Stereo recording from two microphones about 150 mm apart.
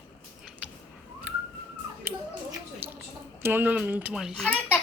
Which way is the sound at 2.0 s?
15° right (ahead or behind).